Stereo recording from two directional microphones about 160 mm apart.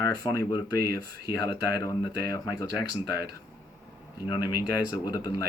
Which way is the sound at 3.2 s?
90° right.